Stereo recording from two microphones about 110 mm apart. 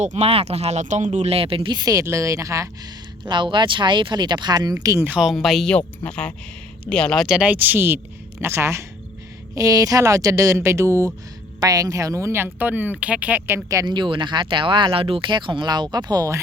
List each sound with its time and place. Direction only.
0.0 s speech: 80° right; by 1.7 s 55° right (ahead or behind)
1.7 s speech: 35° right (ahead or behind)
3.2 s speech: 45° right (ahead or behind)
5.2 s speech: centre (ahead or behind); by 13.6 s 15° right (ahead or behind)
13.7 s speech: 35° right (ahead or behind)